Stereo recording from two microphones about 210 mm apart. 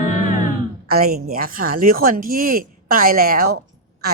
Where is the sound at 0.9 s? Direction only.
45° right (ahead or behind).